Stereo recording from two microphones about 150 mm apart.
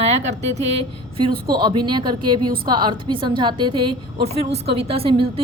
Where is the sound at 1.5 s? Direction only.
30° right (ahead or behind).